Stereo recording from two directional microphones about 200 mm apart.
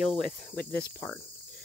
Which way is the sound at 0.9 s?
10° left (ahead or behind).